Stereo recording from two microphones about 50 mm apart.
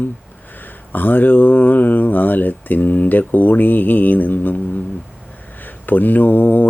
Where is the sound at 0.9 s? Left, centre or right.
Left.